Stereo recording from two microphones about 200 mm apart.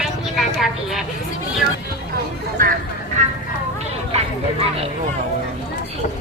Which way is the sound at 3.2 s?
35° right (ahead or behind).